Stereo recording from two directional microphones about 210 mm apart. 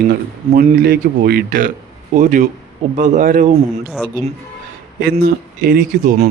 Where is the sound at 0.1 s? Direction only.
45° right (ahead or behind).